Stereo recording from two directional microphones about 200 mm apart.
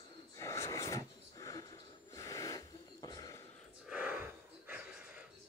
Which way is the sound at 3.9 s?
5° right (ahead or behind).